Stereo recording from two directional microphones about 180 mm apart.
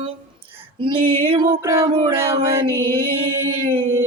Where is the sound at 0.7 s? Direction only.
25° right (ahead or behind).